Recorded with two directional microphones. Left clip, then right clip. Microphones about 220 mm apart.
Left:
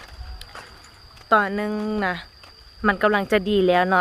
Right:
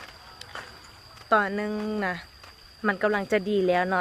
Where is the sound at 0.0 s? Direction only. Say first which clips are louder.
Left 1 dB; 10° left (ahead or behind).